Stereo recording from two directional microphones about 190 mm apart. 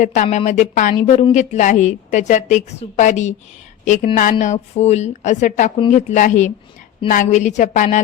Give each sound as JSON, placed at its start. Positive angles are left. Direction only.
{"t": 0.0, "sound": "a woman's voice", "side_deg": 40}